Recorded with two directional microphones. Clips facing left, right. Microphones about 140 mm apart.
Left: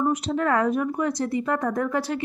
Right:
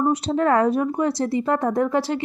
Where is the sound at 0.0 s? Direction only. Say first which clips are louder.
Right 3 dB; 30° right (ahead or behind).